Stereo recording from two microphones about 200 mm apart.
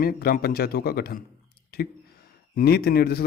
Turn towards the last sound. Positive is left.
turn(degrees=50)  # may be behind; listen again after turning